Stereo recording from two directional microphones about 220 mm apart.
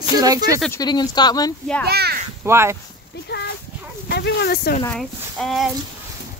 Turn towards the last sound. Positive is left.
turn(degrees=0)  # may be behind; listen again after turning